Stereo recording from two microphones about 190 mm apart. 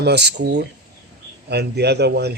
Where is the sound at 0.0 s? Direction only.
60° right (ahead or behind).